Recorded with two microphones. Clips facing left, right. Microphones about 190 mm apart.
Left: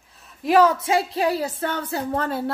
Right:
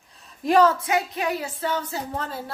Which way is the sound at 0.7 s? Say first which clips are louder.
Left 3 dB; 30° left (ahead or behind).